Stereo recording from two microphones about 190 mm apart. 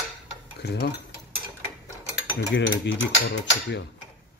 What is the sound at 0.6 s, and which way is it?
Stir, 60° left (ahead or behind).